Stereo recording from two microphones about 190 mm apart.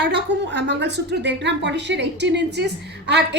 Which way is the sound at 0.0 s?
60° right (ahead or behind).